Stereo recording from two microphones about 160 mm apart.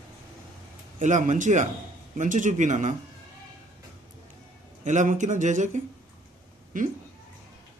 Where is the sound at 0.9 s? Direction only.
50° right (ahead or behind).